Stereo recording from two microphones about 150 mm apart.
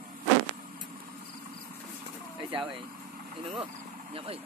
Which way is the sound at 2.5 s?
35° right (ahead or behind).